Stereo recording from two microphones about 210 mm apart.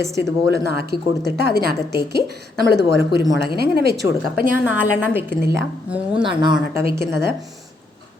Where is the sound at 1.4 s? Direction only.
45° right (ahead or behind).